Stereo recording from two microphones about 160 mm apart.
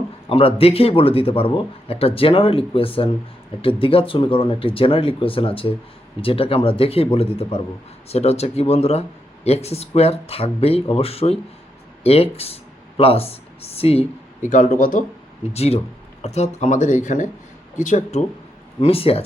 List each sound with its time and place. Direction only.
0.3 s speech: 35° left (ahead or behind)
14.5 s speech: 55° left (ahead or behind)
15.5 s speech: 40° left (ahead or behind)
18.8 s speech: 35° left (ahead or behind)